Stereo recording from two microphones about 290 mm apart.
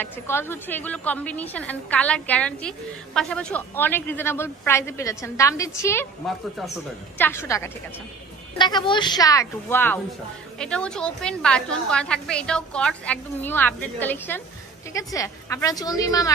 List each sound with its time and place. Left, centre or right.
0.0 s a woman's voice: centre